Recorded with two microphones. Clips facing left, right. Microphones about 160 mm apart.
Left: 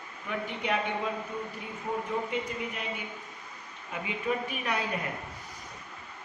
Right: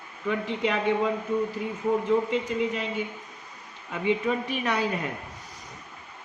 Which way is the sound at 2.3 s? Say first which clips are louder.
Right 7 dB; 90° right.